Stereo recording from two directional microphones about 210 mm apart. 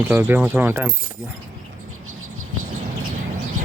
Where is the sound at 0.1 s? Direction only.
10° right (ahead or behind).